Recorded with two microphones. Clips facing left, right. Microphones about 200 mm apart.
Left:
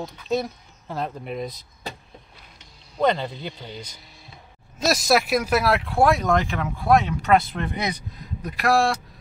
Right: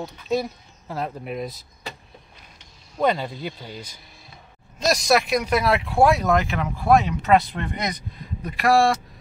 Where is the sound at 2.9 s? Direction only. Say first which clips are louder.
Even; 5° right (ahead or behind).